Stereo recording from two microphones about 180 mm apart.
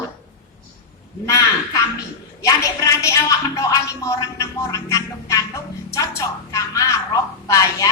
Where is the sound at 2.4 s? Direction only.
15° left (ahead or behind).